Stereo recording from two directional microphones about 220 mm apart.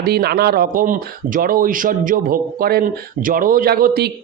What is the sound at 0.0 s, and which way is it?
Speech, 45° right (ahead or behind).